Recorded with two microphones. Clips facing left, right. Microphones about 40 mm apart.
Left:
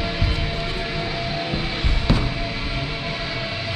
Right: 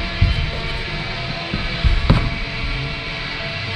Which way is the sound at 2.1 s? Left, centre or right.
Right.